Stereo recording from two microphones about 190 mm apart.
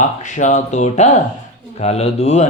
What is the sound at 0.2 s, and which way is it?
Speech, 40° left (ahead or behind).